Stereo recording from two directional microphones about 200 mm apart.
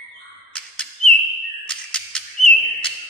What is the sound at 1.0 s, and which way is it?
Chirp, 5° left (ahead or behind).